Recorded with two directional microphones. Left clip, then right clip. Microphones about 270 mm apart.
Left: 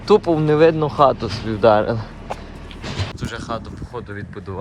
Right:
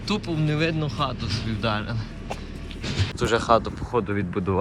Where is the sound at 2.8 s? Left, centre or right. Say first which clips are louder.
Left 2 dB; left.